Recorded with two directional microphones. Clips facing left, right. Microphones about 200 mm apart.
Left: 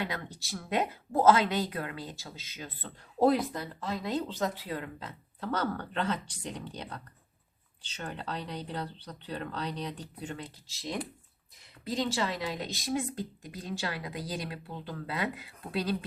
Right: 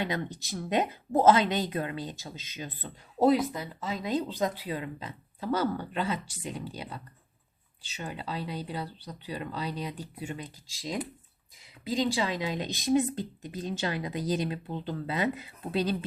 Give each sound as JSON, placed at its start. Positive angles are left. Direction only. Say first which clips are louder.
{"t": 0.0, "sound": "speech", "louder": "right 4 dB", "side_deg": -20}
{"t": 3.2, "sound": "speech", "louder": "right 2 dB", "side_deg": -5}